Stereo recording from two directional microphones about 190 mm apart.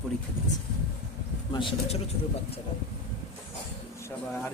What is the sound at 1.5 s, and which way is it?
Speech, 25° left (ahead or behind).